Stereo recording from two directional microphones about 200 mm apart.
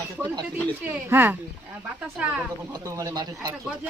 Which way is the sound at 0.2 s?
20° right (ahead or behind).